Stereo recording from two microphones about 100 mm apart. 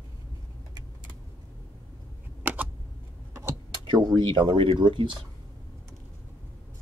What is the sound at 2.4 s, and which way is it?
Computer keyboard, 15° right (ahead or behind).